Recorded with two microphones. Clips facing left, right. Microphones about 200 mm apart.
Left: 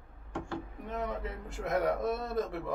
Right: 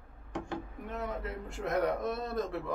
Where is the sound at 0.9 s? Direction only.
Centre (ahead or behind).